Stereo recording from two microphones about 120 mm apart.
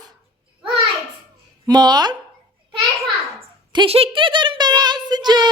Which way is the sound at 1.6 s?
35° right (ahead or behind).